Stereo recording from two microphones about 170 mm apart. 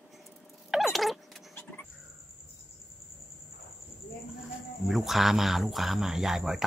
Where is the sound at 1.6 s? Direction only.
15° left (ahead or behind).